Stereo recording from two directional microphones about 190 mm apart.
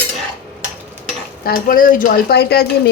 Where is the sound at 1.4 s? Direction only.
50° left (ahead or behind).